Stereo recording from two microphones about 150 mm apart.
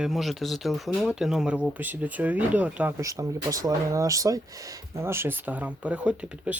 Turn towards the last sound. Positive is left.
turn(degrees=-5)  # may be behind; listen again after turning